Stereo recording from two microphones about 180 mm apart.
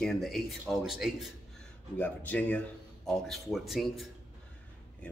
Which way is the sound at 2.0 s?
10° left (ahead or behind).